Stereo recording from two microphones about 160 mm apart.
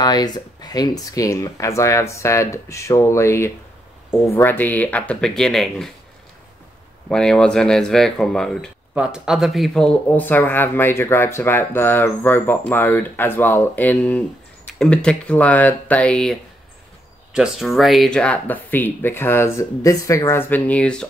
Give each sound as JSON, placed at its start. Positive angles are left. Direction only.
{"t": 0.0, "sound": "speech", "side_deg": 25}
{"t": 7.1, "sound": "speech", "side_deg": 5}